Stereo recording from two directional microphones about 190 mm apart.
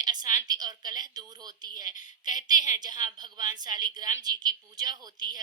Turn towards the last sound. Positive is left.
turn(degrees=-20)  # may be behind; listen again after turning